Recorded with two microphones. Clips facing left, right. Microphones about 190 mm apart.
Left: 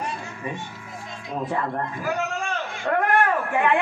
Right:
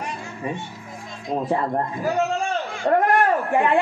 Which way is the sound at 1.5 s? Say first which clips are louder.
Right 4 dB; 35° right (ahead or behind).